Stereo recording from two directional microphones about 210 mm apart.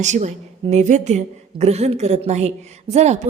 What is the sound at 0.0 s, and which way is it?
A woman's voice, 35° right (ahead or behind).